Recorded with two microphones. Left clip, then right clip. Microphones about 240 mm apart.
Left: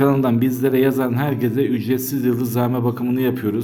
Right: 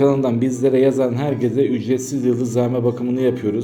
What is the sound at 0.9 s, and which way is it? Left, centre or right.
Speech, left.